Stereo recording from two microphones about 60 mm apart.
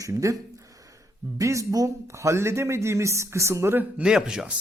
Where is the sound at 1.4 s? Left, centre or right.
Right.